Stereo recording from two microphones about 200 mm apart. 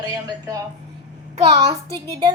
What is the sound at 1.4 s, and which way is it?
Speech, 30° right (ahead or behind).